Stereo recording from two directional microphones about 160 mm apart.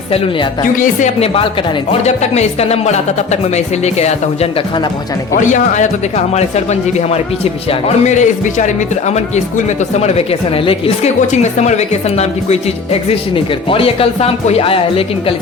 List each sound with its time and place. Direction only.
0.6 s speech: 50° left (ahead or behind); by 15.4 s 35° left (ahead or behind)